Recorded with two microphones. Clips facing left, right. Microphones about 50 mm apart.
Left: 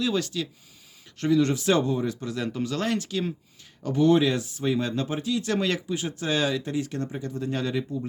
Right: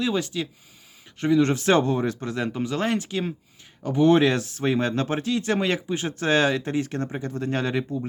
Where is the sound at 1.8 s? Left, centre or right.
Right.